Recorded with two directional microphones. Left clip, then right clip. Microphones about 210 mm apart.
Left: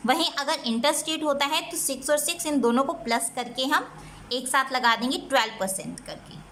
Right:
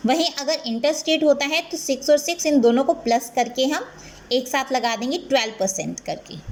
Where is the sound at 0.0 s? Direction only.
5° right (ahead or behind).